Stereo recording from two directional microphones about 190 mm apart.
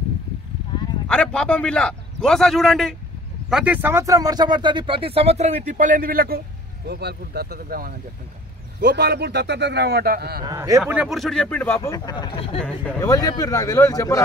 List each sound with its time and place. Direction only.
1.0 s a man's voice: 5° left (ahead or behind); by 10.4 s 55° right (ahead or behind)
10.4 s speech: 15° right (ahead or behind)
10.9 s a man's voice: 5° right (ahead or behind)
11.9 s speech: 20° left (ahead or behind)
12.5 s a man's voice: 5° left (ahead or behind)
13.0 s speech: 20° left (ahead or behind)